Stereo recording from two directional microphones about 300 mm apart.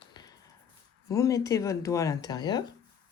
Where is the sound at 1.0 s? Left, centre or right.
Centre.